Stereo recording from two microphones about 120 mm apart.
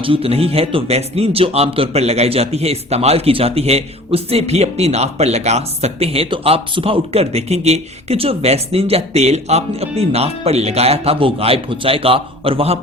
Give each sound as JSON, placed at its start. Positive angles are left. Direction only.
{"t": 0.0, "sound": "speech", "side_deg": -50}